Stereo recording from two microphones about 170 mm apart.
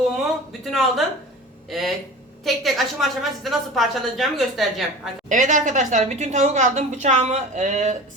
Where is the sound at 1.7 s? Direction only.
Centre (ahead or behind).